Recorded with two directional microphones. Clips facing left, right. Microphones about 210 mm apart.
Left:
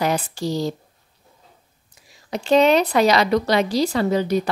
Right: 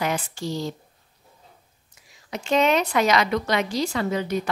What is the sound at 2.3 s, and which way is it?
A woman's voice, 35° left (ahead or behind).